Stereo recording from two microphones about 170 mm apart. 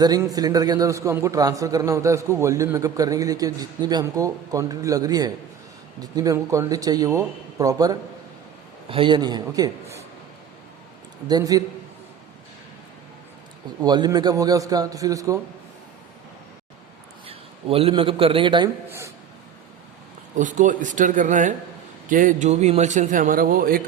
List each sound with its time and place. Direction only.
0.0 s a man's voice: 20° right (ahead or behind)
11.3 s a man's voice: 20° right (ahead or behind)
13.8 s a man's voice: 25° right (ahead or behind)
17.2 s a man's voice: 35° right (ahead or behind)
18.9 s a sound: 15° right (ahead or behind)
20.4 s a man's voice: 50° right (ahead or behind)